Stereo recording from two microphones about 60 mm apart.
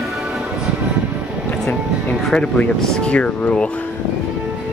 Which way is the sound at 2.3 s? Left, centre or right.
Centre.